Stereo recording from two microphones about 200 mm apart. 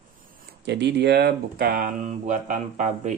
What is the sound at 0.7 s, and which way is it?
Speech, 60° right (ahead or behind).